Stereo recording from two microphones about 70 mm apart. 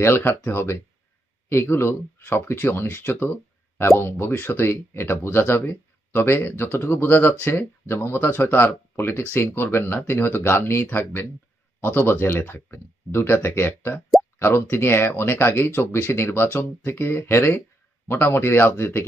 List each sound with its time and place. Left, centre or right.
0.0 s speech: left